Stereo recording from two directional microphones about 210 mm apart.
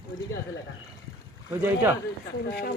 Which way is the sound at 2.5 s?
50° left (ahead or behind).